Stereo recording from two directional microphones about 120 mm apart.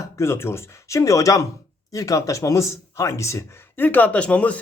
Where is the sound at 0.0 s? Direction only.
25° left (ahead or behind).